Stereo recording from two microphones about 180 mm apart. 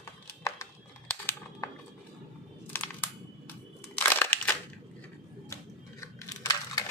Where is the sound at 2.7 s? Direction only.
10° left (ahead or behind).